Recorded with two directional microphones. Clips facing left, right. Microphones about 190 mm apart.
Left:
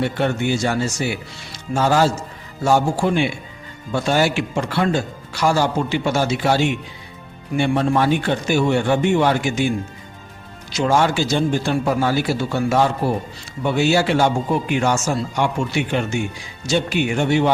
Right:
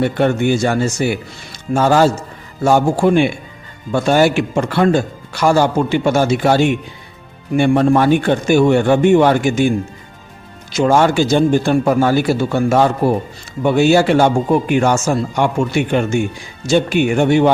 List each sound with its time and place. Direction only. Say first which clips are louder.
0.0 s speech: right 5 dB; 50° right (ahead or behind)